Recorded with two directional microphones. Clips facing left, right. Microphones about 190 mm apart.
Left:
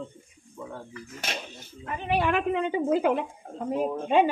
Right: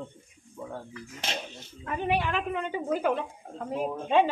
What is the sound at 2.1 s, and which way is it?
Speech, 55° left (ahead or behind).